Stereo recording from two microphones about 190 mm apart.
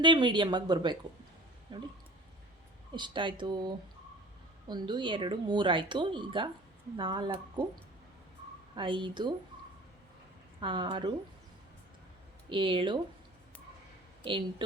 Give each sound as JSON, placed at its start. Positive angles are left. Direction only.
{"t": 0.0, "sound": "speech", "side_deg": -25}
{"t": 2.9, "sound": "speech", "side_deg": -25}
{"t": 8.7, "sound": "speech", "side_deg": -25}
{"t": 10.6, "sound": "speech", "side_deg": -25}
{"t": 12.5, "sound": "speech", "side_deg": -25}